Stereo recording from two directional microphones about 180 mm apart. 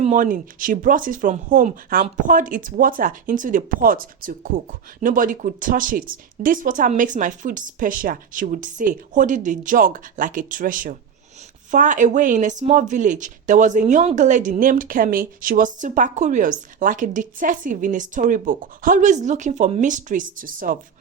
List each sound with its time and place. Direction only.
0.0 s speech: 45° right (ahead or behind)